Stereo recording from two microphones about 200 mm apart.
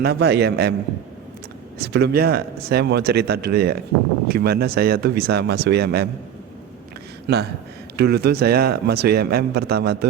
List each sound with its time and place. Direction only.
0.0 s a man's voice: 55° right (ahead or behind)
1.8 s speech: 55° right (ahead or behind)
7.3 s a man's voice: 55° right (ahead or behind)